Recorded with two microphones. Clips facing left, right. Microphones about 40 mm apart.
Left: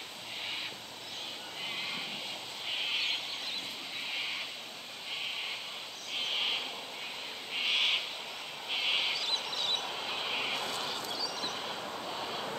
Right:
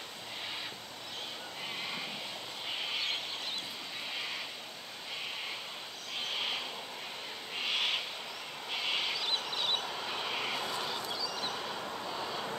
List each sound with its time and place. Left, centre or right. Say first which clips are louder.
6.1 s a sound: left 3 dB; centre
7.5 s owl: left 3 dB; centre
9.1 s bird: even; centre
9.5 s train: right 1 dB; centre
9.8 s vehicle: left 1 dB; centre
10.7 s vehicle: even; centre
11.5 s vehicle: even; centre